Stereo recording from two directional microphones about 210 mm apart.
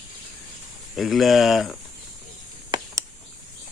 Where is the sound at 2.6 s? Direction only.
20° right (ahead or behind).